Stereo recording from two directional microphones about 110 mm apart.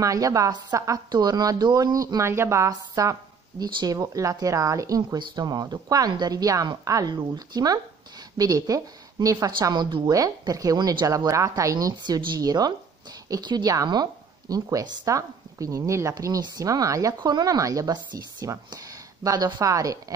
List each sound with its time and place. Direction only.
0.0 s speech: 30° right (ahead or behind)
10.1 s speech: 30° right (ahead or behind)